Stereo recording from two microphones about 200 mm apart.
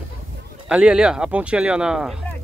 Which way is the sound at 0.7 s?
5° right (ahead or behind).